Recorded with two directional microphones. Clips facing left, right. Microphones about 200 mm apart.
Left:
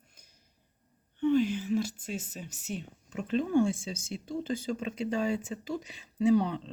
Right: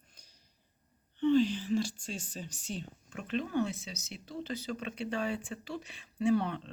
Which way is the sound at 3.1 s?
25° left (ahead or behind).